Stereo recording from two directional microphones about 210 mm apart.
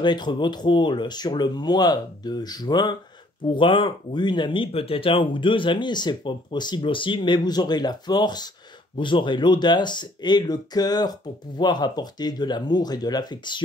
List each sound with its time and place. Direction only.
0.0 s speech: 20° left (ahead or behind)